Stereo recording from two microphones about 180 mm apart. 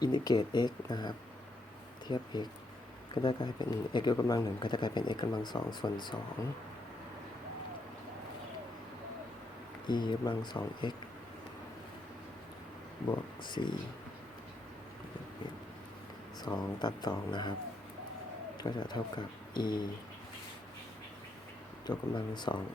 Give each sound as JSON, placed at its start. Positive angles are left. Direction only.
{"t": 0.0, "sound": "speech", "side_deg": 25}
{"t": 9.8, "sound": "speech", "side_deg": 25}
{"t": 13.4, "sound": "speech", "side_deg": 25}
{"t": 16.4, "sound": "speech", "side_deg": 25}
{"t": 18.5, "sound": "speech", "side_deg": 25}
{"t": 21.8, "sound": "speech", "side_deg": 25}